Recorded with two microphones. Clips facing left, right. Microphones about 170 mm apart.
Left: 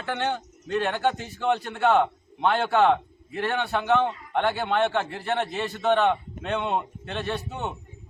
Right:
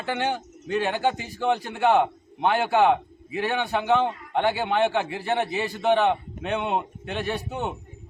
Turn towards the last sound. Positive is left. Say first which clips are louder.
# right 2 dB
turn(degrees=-15)  # may be behind; listen again after turning